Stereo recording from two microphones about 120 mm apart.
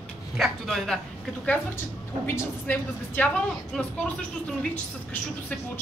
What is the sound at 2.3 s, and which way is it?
A woman's voice, 15° left (ahead or behind).